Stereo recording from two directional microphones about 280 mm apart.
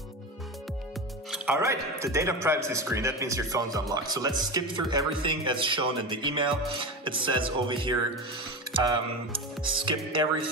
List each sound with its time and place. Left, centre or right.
1.3 s speech: centre